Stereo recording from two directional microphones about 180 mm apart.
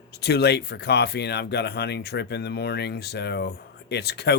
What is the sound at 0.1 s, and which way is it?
Speech, 65° left (ahead or behind).